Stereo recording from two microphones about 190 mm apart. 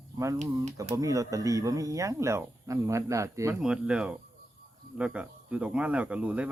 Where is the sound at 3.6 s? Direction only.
5° right (ahead or behind).